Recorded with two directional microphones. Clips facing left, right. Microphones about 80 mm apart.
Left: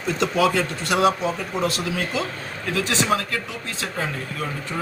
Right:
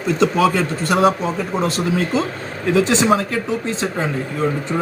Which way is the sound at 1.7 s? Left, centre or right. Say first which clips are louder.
Right 7 dB; right.